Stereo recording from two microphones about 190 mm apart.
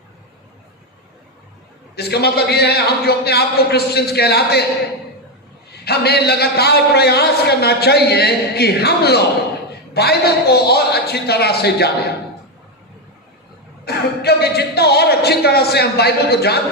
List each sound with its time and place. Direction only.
2.0 s a man's voice: 60° left (ahead or behind)
5.8 s a man's voice: 60° left (ahead or behind)
13.8 s a man's voice: 60° left (ahead or behind)